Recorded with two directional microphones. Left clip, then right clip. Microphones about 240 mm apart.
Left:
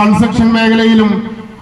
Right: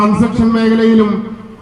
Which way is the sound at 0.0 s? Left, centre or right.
Left.